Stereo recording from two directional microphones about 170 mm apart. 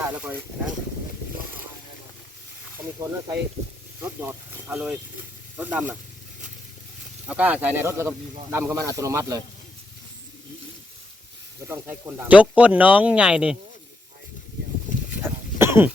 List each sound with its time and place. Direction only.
0.2 s speech: 10° right (ahead or behind)
2.7 s speech: 15° right (ahead or behind)
7.3 s speech: 5° right (ahead or behind)
11.7 s speech: 10° right (ahead or behind)
15.2 s a sound: 15° right (ahead or behind)